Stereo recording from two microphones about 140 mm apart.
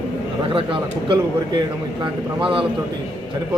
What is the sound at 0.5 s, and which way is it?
A man's voice, 35° right (ahead or behind).